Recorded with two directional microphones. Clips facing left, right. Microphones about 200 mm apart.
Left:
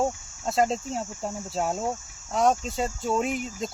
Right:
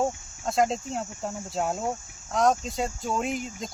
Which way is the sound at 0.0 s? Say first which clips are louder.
Left 1 dB; 5° left (ahead or behind).